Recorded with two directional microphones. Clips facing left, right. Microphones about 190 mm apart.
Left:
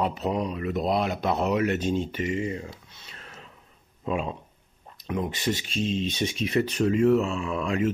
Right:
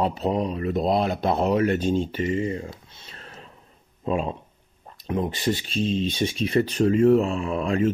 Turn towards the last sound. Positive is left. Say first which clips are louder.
# right 3 dB
turn(degrees=-35)  # may be behind; listen again after turning